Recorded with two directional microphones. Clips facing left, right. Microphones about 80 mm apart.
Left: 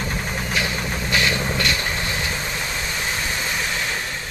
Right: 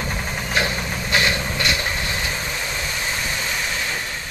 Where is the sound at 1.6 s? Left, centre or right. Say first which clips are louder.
Even; centre.